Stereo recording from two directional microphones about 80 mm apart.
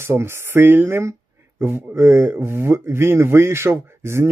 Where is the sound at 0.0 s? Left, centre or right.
Right.